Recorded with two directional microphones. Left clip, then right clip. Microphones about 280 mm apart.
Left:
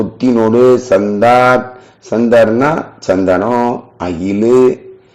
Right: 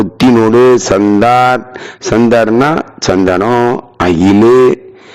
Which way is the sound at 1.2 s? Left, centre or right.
Right.